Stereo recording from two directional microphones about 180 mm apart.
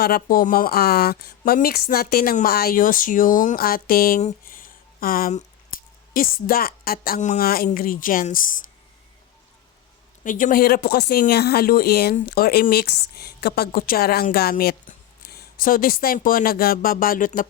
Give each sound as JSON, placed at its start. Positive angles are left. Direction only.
{"t": 0.0, "sound": "a woman's voice", "side_deg": 55}
{"t": 4.2, "sound": "a sound", "side_deg": 45}
{"t": 6.1, "sound": "a woman's voice", "side_deg": 55}
{"t": 10.2, "sound": "a woman's voice", "side_deg": 50}